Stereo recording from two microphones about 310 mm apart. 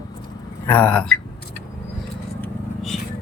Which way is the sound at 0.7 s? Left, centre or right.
Centre.